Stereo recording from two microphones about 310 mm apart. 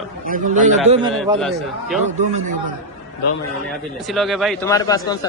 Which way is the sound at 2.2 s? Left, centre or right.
Right.